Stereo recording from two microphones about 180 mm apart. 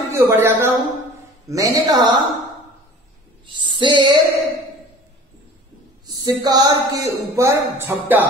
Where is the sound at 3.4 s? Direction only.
25° right (ahead or behind).